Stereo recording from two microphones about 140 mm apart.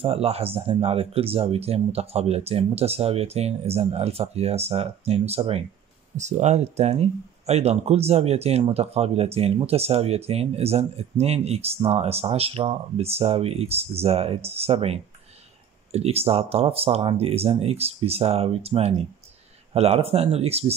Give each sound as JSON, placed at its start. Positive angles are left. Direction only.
{"t": 0.0, "sound": "speech", "side_deg": -45}